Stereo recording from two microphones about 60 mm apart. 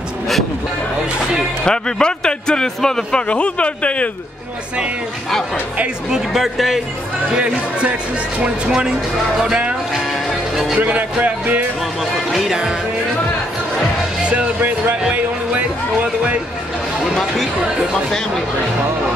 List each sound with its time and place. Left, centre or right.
1.6 s a man's voice: centre
6.0 s speech: centre
7.3 s speech: centre
8.6 s music: centre
9.9 s music: centre
10.8 s speech: right
12.0 s speech: centre
14.2 s music: right
17.0 s speech: centre